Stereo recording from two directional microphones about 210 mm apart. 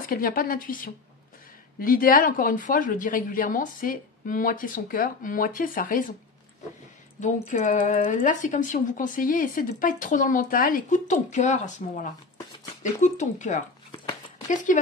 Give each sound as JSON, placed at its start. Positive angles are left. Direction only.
{"t": 0.1, "sound": "a woman's voice", "side_deg": 45}
{"t": 7.2, "sound": "speech", "side_deg": 35}